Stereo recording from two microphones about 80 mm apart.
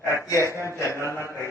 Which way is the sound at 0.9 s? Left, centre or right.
Right.